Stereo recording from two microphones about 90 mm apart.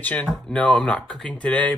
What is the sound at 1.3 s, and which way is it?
Speech, 15° left (ahead or behind).